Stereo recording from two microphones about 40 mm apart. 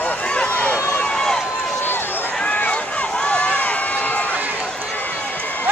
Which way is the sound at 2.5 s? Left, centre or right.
Left.